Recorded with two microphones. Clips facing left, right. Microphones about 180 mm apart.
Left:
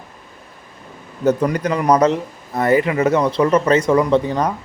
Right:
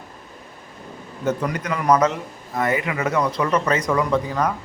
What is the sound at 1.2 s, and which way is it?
Speech, 35° left (ahead or behind).